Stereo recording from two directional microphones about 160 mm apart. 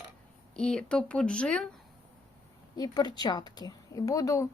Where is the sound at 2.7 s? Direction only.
25° left (ahead or behind).